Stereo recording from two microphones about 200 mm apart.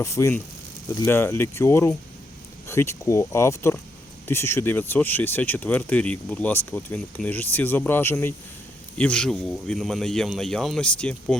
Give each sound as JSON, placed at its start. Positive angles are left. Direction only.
{"t": 0.0, "sound": "speech", "side_deg": 15}